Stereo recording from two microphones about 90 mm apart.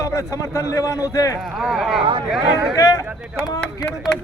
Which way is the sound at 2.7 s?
40° left (ahead or behind).